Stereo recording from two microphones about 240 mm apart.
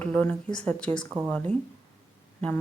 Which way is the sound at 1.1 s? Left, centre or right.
Right.